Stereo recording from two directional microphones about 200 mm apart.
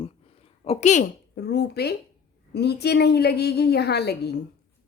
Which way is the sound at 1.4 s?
55° left (ahead or behind).